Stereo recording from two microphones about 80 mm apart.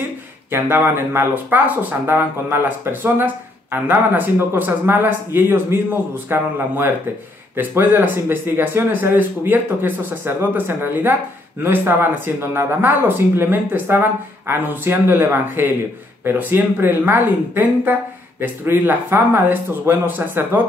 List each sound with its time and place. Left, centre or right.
0.5 s speech: right